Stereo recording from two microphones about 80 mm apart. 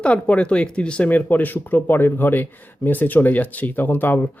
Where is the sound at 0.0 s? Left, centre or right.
Centre.